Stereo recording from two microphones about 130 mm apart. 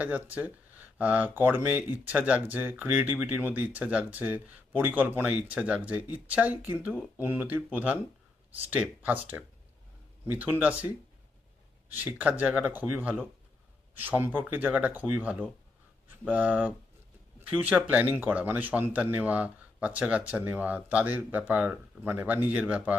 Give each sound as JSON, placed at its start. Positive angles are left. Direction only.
{"t": 0.0, "sound": "speech", "side_deg": -10}
{"t": 11.9, "sound": "speech", "side_deg": -15}